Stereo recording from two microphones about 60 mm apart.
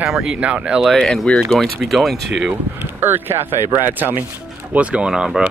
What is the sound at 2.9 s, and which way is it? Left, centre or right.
Speech, right.